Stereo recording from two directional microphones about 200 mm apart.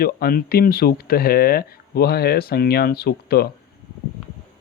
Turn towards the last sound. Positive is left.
turn(degrees=50)  # may be behind; listen again after turning